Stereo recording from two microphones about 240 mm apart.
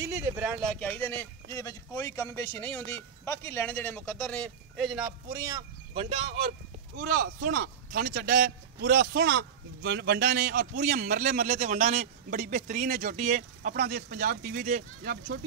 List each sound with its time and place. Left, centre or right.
0.0 s speech: centre
0.7 s speech: centre
5.9 s a man's voice: right